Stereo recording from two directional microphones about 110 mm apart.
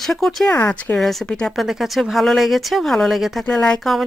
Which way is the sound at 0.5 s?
15° left (ahead or behind).